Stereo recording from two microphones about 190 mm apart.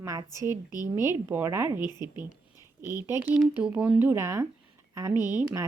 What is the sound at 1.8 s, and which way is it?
Speech, 20° left (ahead or behind).